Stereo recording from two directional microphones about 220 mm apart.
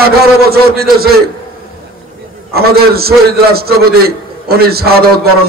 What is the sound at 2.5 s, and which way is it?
A man's voice, 45° right (ahead or behind).